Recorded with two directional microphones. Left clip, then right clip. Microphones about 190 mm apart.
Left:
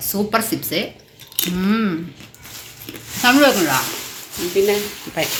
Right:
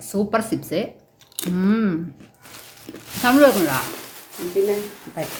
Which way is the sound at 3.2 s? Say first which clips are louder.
Left 1 dB; 20° right (ahead or behind).